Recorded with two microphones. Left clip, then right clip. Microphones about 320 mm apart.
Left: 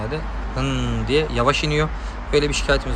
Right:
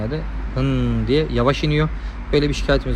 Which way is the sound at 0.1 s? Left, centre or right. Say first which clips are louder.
Even; centre.